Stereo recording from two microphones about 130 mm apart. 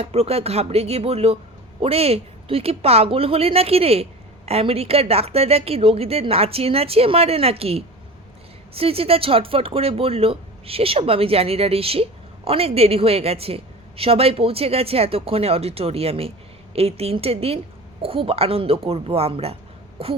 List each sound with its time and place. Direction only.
0.0 s a woman's voice: 50° right (ahead or behind)